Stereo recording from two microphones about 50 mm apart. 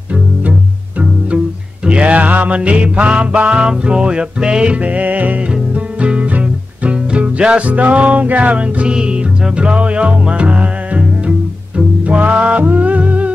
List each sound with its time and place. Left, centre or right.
1.9 s music: right
5.5 s music: right